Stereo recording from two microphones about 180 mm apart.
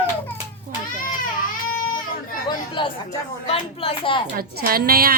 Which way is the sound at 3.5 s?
30° left (ahead or behind).